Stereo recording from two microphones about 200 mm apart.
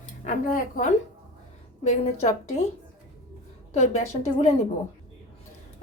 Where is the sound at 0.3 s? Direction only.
40° left (ahead or behind).